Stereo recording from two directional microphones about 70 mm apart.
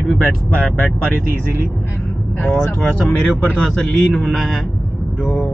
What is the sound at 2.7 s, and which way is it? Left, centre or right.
Speech, centre.